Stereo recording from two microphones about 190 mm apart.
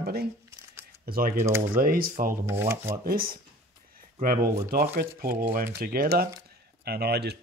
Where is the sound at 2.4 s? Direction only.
15° right (ahead or behind).